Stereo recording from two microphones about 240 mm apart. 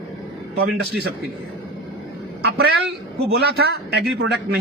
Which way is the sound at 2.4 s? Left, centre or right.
Right.